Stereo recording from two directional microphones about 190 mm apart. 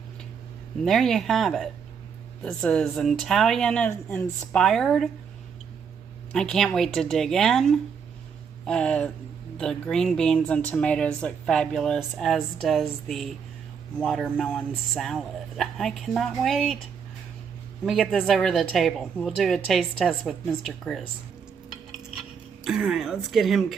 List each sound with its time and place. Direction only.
0.9 s speech: centre (ahead or behind)
6.3 s speech: centre (ahead or behind)
17.8 s speech: centre (ahead or behind)
22.6 s speech: centre (ahead or behind)